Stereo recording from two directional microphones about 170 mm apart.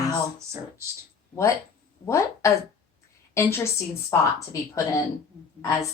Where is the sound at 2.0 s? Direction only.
15° left (ahead or behind).